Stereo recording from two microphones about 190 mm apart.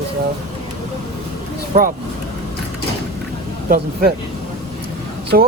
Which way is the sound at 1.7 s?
50° right (ahead or behind).